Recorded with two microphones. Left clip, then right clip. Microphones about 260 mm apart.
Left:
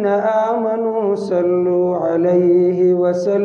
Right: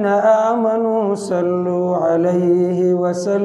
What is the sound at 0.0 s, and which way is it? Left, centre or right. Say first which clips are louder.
Mantra: right 2 dB; right.